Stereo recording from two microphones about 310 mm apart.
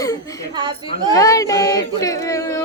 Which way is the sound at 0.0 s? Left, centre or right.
Centre.